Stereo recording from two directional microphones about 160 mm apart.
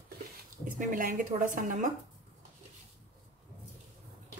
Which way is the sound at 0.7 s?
55° right (ahead or behind).